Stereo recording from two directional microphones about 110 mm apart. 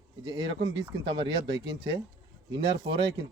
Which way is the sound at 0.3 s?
50° right (ahead or behind).